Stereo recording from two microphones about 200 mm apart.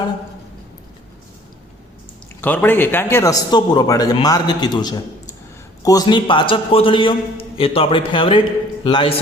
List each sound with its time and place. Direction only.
2.4 s a man's voice: 10° left (ahead or behind); by 9.1 s 25° left (ahead or behind)